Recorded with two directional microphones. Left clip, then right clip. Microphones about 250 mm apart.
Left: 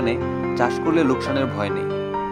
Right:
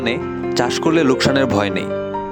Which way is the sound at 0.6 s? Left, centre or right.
Right.